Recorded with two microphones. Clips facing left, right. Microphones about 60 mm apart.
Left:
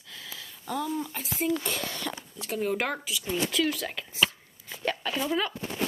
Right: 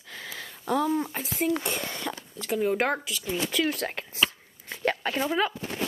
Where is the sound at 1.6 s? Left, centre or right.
Centre; by 4.1 s right.